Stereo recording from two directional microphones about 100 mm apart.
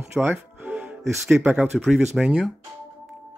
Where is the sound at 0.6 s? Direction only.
15° right (ahead or behind).